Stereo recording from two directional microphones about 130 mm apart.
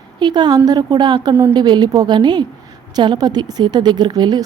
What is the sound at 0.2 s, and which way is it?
A woman's voice, 35° right (ahead or behind).